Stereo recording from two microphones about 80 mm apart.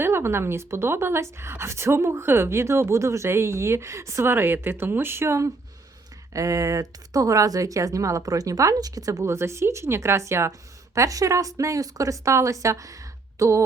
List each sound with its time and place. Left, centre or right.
0.0 s speech: right